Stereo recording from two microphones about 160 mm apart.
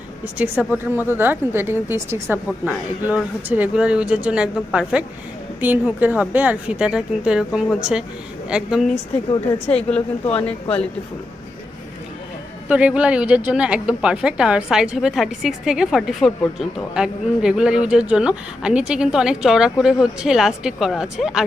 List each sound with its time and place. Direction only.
0.3 s a woman's voice: 10° right (ahead or behind); by 10.0 s 5° left (ahead or behind)
10.2 s speech: 35° left (ahead or behind)
12.6 s speech: 10° right (ahead or behind)